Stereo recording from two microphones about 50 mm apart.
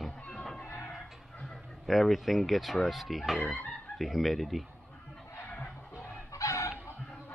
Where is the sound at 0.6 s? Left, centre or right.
Left.